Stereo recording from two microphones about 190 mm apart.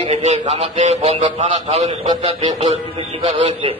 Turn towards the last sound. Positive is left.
turn(degrees=-30)  # may be behind; listen again after turning